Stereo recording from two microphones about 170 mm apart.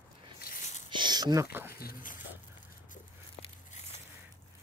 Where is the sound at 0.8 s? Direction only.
25° right (ahead or behind).